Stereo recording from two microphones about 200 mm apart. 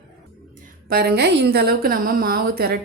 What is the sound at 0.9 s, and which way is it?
A woman's voice, 50° right (ahead or behind).